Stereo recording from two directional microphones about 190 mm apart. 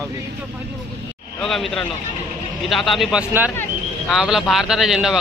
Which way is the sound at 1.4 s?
Centre (ahead or behind).